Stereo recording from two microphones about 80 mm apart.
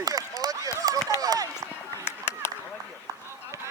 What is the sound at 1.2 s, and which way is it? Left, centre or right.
Run, right.